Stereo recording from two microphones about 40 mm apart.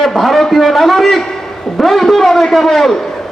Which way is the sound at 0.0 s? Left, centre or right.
Centre.